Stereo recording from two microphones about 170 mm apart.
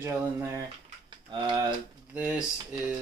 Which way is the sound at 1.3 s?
25° right (ahead or behind).